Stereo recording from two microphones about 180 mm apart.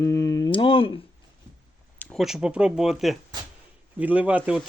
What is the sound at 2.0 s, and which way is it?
Speech, 5° left (ahead or behind).